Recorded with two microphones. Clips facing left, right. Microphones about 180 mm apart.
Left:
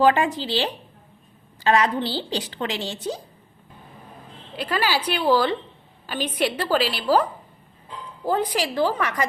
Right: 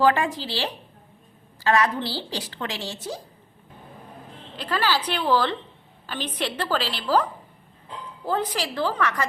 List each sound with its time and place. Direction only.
0.0 s a woman's voice: 15° left (ahead or behind)
4.5 s a woman's voice: 10° left (ahead or behind)
8.3 s a woman's voice: 15° left (ahead or behind)